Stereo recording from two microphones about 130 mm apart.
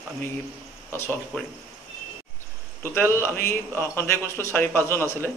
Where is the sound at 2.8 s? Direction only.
20° left (ahead or behind).